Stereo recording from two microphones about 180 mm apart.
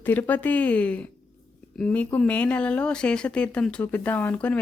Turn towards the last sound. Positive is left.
turn(degrees=5)  # may be behind; listen again after turning